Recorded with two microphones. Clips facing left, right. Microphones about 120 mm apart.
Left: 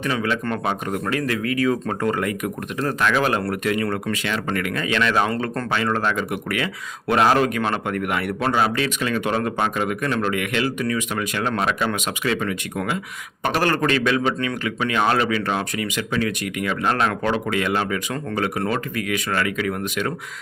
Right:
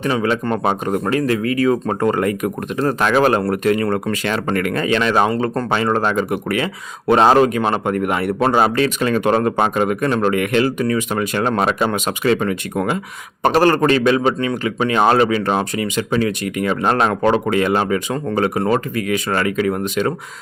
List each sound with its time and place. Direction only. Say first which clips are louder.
0.0 s speech: right 5 dB; 30° right (ahead or behind)